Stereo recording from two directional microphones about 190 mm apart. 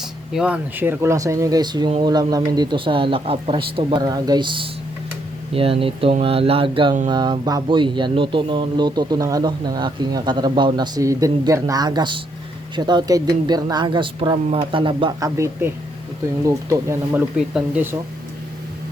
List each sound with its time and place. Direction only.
0.3 s speech: 5° right (ahead or behind); by 15.3 s 25° right (ahead or behind)
16.5 s speech: 15° right (ahead or behind)